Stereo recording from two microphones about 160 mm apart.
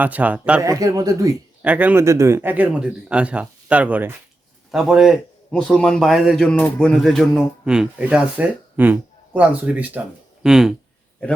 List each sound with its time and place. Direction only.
0.0 s speech: 10° right (ahead or behind)
0.6 s speech: 20° right (ahead or behind)
1.6 s a man's voice: 10° right (ahead or behind)